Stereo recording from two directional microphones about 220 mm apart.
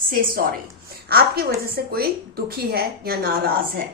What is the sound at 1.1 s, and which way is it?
A woman's voice, 45° right (ahead or behind).